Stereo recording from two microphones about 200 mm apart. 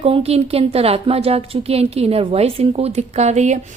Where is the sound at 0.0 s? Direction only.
30° right (ahead or behind).